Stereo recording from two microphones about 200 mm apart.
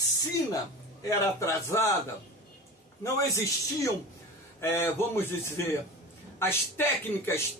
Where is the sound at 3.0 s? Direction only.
15° left (ahead or behind).